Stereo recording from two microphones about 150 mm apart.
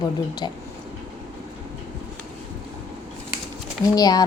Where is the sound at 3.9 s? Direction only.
25° left (ahead or behind).